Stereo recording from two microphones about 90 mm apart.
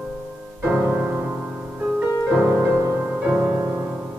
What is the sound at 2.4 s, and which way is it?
Music, 25° right (ahead or behind).